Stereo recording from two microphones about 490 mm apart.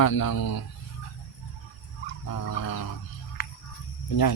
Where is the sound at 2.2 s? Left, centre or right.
Left.